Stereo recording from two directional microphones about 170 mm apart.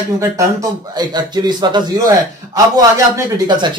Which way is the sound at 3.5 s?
25° right (ahead or behind).